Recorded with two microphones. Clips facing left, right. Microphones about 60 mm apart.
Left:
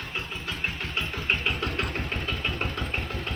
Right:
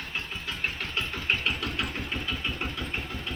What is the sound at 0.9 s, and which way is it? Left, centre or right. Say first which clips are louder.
Engine: left 1 dB; left.